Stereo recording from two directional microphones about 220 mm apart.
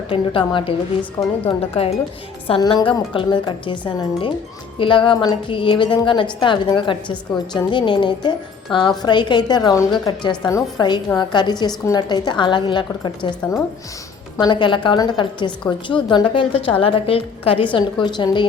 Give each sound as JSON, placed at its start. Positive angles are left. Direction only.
{"t": 0.1, "sound": "a woman's voice", "side_deg": 25}
{"t": 14.3, "sound": "a woman's voice", "side_deg": 20}